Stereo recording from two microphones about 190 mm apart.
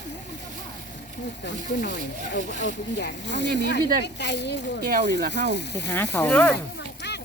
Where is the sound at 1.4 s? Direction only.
65° left (ahead or behind).